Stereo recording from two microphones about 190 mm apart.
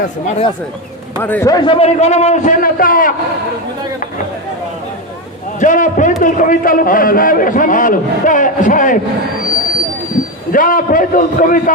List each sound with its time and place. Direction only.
0.3 s a man's voice: 30° left (ahead or behind)
1.2 s a man's voice: 10° left (ahead or behind); by 3.1 s 50° left (ahead or behind)
5.5 s a man's voice: 45° left (ahead or behind)
10.5 s a man's voice: 45° left (ahead or behind)